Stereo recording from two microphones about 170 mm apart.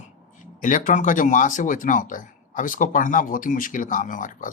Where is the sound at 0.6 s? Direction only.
50° left (ahead or behind).